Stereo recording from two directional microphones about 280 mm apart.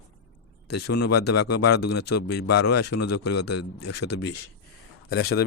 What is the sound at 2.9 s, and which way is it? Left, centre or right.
Speech, left.